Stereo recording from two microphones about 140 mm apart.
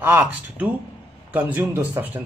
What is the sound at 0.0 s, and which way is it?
Speech, 15° right (ahead or behind).